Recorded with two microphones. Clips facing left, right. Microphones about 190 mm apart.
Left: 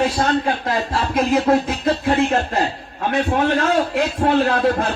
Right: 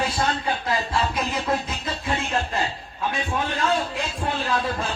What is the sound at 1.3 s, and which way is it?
A man's voice, 65° left (ahead or behind).